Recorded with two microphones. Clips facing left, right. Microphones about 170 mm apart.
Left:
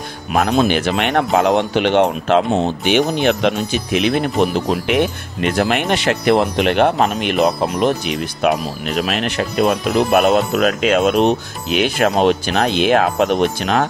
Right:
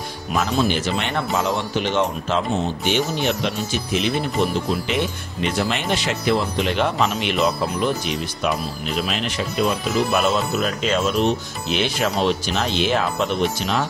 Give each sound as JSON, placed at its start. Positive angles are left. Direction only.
{"t": 0.3, "sound": "speech", "side_deg": 60}
{"t": 13.4, "sound": "speech", "side_deg": 55}